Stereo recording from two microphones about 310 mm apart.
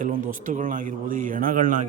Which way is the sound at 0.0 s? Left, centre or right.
Right.